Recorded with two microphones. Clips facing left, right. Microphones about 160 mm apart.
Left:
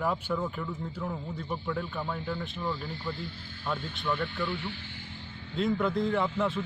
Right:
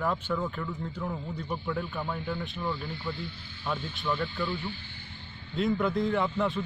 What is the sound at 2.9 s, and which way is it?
Speech, 40° left (ahead or behind).